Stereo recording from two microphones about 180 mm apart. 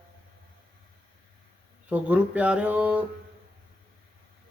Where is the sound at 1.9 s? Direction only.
10° right (ahead or behind).